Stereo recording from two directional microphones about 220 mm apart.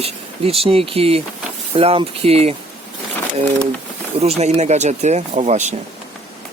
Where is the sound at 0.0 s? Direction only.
25° right (ahead or behind).